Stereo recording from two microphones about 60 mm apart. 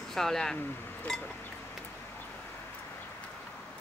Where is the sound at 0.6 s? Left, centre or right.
Left.